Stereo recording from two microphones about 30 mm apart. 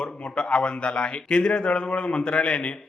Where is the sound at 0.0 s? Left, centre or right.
Left.